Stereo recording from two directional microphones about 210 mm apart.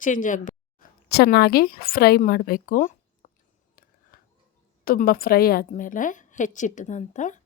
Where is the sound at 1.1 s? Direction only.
50° left (ahead or behind).